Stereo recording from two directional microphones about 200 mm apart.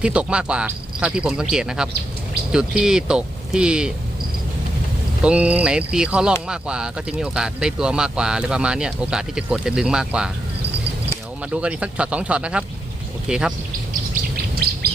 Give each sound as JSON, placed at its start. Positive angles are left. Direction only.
{"t": 0.0, "sound": "speech", "side_deg": -5}
{"t": 5.2, "sound": "speech", "side_deg": -5}
{"t": 11.5, "sound": "speech", "side_deg": -5}
{"t": 14.1, "sound": "bird", "side_deg": -50}